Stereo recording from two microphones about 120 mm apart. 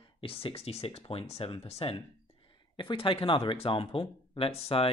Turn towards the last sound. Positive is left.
turn(degrees=55)  # may be behind; listen again after turning